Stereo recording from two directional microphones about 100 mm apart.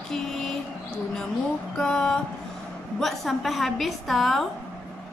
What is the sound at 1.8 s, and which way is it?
A woman's voice, 5° left (ahead or behind).